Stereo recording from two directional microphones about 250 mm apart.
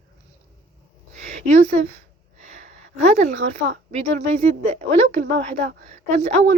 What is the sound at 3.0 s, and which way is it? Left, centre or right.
Speech, right.